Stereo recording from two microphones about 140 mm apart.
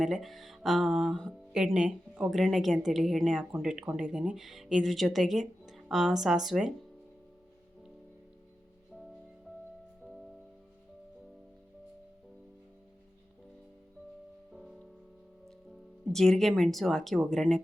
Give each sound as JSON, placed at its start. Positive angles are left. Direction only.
{"t": 0.0, "sound": "speech", "side_deg": 0}
{"t": 14.5, "sound": "music", "side_deg": 0}
{"t": 15.4, "sound": "speech", "side_deg": 0}